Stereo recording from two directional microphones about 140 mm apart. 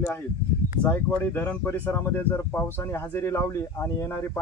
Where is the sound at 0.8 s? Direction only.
15° left (ahead or behind).